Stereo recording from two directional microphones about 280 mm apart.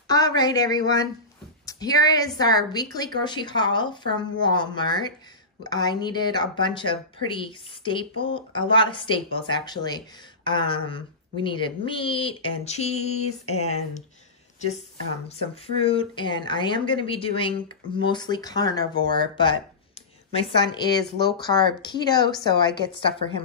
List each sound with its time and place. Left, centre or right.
0.1 s speech: centre